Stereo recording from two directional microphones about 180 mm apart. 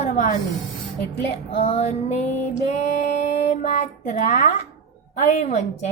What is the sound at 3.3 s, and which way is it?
Speech, 40° left (ahead or behind).